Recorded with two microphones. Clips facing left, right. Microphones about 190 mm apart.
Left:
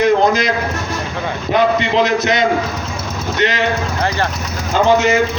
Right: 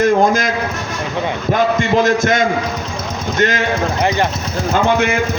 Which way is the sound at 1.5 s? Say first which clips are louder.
Left 1 dB; 45° right (ahead or behind).